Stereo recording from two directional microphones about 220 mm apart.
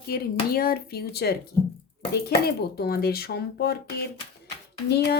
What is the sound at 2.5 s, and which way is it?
Speech, 45° left (ahead or behind).